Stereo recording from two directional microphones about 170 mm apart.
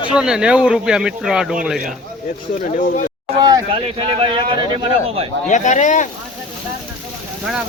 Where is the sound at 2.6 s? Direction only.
50° left (ahead or behind).